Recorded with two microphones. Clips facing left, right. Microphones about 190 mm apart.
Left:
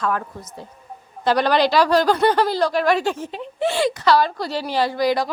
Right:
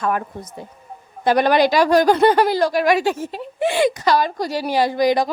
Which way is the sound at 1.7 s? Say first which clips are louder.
Right 2 dB; 15° right (ahead or behind).